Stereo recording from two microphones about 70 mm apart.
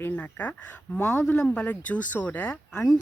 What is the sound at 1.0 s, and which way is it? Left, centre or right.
Speech, left.